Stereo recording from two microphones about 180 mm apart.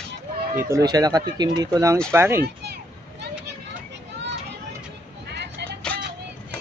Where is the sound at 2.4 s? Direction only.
65° right (ahead or behind).